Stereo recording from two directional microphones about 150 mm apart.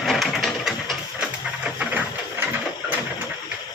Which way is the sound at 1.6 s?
5° right (ahead or behind).